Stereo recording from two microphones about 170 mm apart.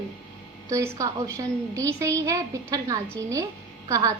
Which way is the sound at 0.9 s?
20° right (ahead or behind).